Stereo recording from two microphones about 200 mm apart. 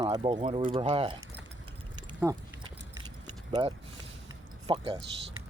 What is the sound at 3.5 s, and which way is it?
Speech, 25° right (ahead or behind).